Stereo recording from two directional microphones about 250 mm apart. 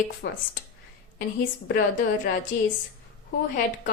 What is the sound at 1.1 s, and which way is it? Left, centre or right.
Speech, left.